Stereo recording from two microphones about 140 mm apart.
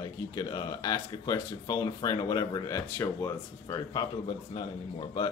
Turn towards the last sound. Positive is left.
turn(degrees=30)  # may be behind; listen again after turning